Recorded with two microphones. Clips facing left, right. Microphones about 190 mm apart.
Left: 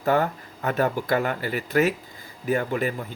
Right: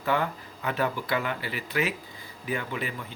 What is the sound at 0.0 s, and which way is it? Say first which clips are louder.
Speech: left 5 dB; 45° left (ahead or behind).